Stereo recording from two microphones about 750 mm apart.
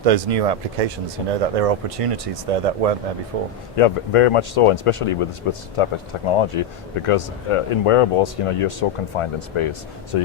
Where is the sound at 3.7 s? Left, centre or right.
Left.